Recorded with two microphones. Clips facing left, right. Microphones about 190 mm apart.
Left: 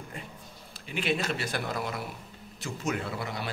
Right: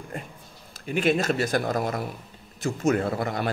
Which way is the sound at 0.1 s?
50° right (ahead or behind).